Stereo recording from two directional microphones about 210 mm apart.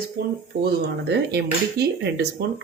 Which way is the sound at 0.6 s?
50° right (ahead or behind).